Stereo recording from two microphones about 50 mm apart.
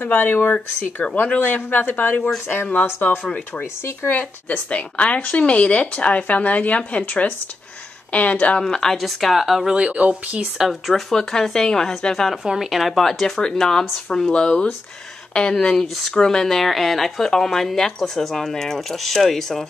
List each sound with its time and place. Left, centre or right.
0.0 s a woman's voice: left
8.6 s speech: centre
8.9 s speech: centre
9.8 s speech: right
10.6 s speech: centre
11.1 s speech: centre
12.4 s speech: centre